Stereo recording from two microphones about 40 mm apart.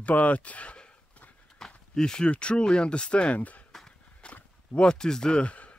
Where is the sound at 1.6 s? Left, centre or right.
Centre.